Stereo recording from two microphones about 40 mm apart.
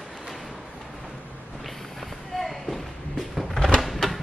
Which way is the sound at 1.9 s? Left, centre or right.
Centre.